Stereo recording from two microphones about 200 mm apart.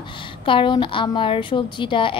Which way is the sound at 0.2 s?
25° left (ahead or behind).